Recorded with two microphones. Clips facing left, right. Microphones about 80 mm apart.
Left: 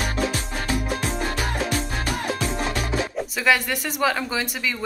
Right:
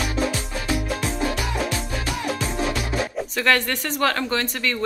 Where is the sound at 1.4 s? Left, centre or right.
Left.